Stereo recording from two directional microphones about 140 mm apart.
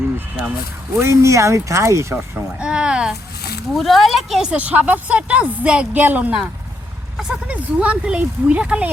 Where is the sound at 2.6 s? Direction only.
5° right (ahead or behind).